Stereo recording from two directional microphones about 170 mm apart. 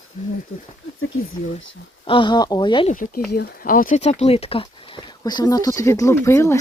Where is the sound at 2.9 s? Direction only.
55° left (ahead or behind).